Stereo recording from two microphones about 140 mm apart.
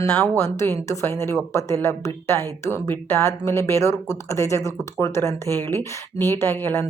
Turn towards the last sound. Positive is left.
turn(degrees=15)  # may be behind; listen again after turning